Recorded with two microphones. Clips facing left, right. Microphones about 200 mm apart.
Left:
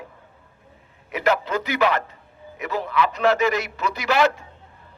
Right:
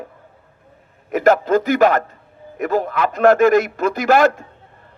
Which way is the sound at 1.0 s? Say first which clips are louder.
Right 8 dB; 45° right (ahead or behind).